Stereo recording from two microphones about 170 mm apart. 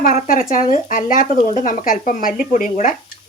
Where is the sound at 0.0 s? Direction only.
50° left (ahead or behind).